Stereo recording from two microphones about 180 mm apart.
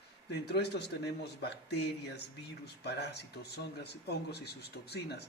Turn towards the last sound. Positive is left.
turn(degrees=65)  # may be behind; listen again after turning